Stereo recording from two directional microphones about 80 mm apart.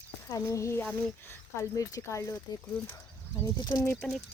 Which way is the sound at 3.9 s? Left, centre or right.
Centre.